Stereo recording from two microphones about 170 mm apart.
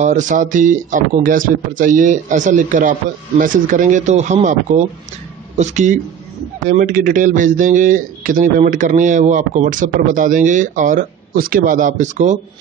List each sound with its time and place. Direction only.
0.0 s a man's voice: 45° right (ahead or behind)